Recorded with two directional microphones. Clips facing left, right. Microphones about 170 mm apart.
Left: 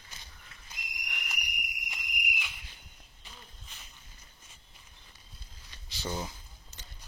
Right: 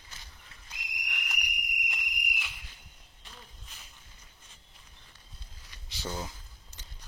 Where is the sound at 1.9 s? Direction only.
Centre (ahead or behind).